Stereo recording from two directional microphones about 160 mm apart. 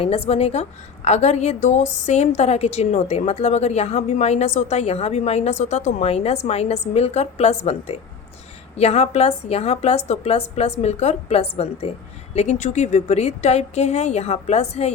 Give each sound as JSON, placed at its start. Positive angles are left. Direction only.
{"t": 0.0, "sound": "a woman's voice", "side_deg": 40}